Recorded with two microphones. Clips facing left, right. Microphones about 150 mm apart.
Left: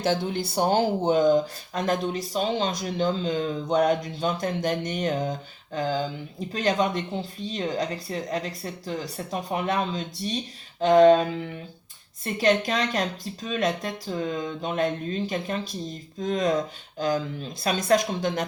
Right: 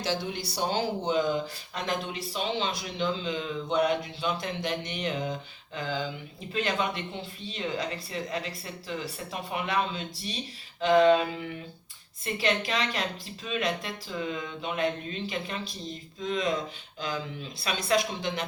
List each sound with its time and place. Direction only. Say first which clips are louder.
0.0 s speech: left 6 dB; 50° left (ahead or behind)
6.5 s speech: left 5 dB; 40° left (ahead or behind)